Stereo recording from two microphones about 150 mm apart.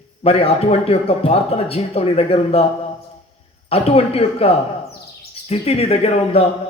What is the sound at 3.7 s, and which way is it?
Speech, 40° left (ahead or behind).